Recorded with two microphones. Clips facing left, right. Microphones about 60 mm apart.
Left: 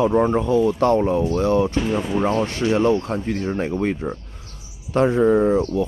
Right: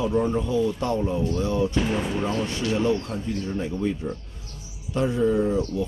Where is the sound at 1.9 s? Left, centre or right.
Left.